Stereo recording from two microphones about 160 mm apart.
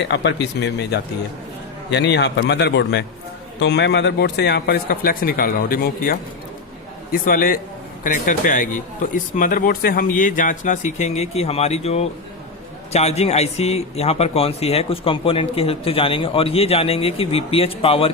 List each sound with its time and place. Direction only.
0.1 s a man's voice: 90° left; by 18.1 s 35° left (ahead or behind)